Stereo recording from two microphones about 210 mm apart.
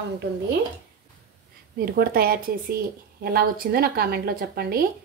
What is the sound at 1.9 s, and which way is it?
A woman's voice, 45° right (ahead or behind).